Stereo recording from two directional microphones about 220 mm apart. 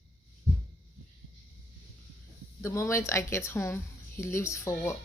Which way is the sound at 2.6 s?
15° left (ahead or behind).